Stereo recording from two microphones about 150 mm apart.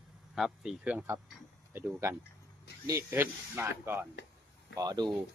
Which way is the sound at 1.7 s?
15° right (ahead or behind).